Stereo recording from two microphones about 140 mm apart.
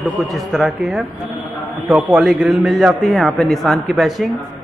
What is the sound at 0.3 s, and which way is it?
A man's voice, centre (ahead or behind).